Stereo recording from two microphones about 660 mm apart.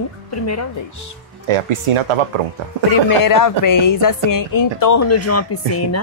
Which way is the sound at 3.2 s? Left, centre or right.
Left.